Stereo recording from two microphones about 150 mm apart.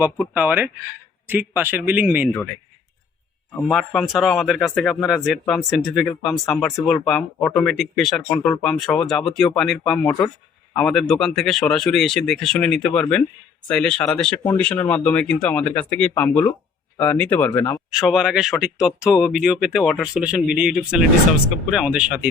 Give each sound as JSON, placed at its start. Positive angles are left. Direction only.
{"t": 0.3, "sound": "a man's voice", "side_deg": -10}
{"t": 3.7, "sound": "speech", "side_deg": 0}
{"t": 17.9, "sound": "a man's voice", "side_deg": -5}